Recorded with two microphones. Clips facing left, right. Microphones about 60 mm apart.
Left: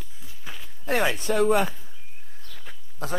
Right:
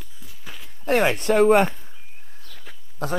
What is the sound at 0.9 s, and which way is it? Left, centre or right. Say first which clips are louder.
Speech: right 5 dB; right.